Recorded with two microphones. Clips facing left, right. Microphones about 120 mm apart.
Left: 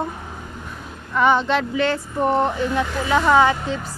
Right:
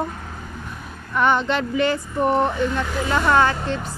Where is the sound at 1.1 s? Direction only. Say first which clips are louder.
Left 2 dB; centre (ahead or behind).